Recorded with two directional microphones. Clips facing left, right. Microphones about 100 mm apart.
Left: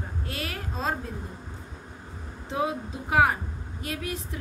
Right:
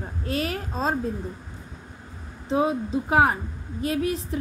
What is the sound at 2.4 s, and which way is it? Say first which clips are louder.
A woman's voice: right 6 dB; 30° right (ahead or behind).